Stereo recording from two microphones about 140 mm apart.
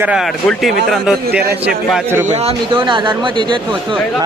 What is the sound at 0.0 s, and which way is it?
Speech, 10° right (ahead or behind).